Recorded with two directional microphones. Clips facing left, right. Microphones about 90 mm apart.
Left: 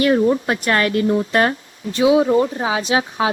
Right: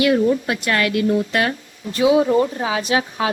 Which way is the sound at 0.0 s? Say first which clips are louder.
Left 1 dB; 40° left (ahead or behind).